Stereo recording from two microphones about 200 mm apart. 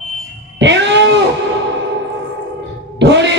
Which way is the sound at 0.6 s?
65° right (ahead or behind).